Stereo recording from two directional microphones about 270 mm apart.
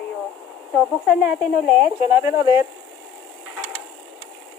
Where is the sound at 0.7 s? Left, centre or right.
Centre.